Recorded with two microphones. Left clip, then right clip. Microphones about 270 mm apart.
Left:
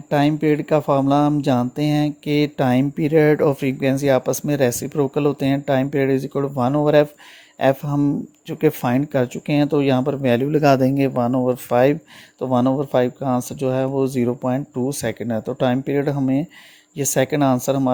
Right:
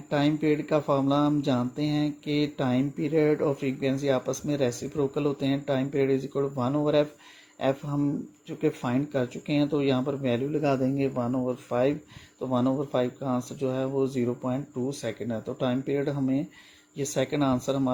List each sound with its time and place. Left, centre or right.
0.1 s speech: left